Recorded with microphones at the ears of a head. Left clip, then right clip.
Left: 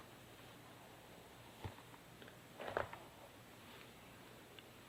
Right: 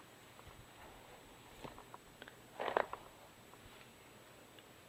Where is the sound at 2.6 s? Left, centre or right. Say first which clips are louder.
Right 6 dB; right.